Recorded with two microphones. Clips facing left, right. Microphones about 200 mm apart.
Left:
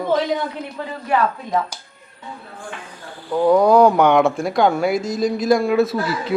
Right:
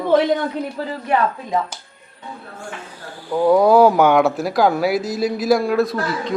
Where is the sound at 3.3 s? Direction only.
5° right (ahead or behind).